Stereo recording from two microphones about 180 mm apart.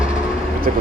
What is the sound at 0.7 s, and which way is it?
Speech, 45° right (ahead or behind).